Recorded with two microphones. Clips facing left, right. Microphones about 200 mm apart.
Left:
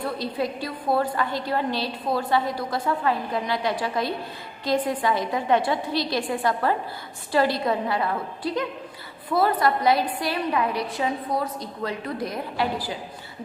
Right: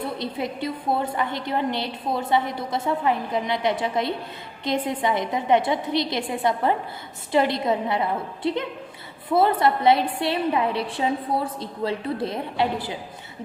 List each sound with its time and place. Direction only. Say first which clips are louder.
0.0 s a woman's voice: left 1 dB; 20° right (ahead or behind)